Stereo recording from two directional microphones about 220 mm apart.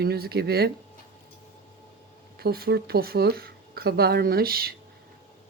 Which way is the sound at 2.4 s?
45° right (ahead or behind).